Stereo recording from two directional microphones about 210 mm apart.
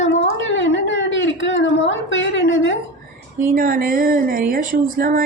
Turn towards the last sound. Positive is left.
turn(degrees=-45)  # may be behind; listen again after turning